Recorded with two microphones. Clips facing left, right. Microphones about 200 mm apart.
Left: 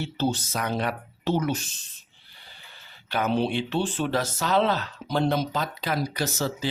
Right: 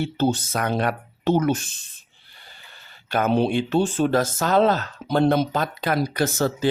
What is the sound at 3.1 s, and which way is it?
Speech, 50° right (ahead or behind).